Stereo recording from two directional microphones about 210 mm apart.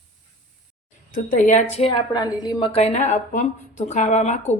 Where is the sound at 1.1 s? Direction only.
35° left (ahead or behind).